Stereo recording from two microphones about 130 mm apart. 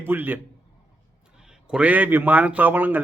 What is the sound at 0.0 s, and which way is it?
Speech, 15° right (ahead or behind).